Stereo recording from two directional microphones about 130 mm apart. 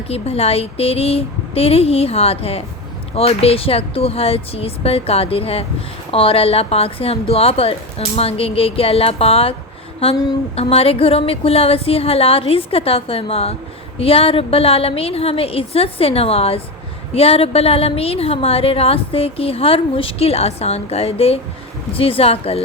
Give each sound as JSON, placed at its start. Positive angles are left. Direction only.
{"t": 0.1, "sound": "a woman's voice", "side_deg": 50}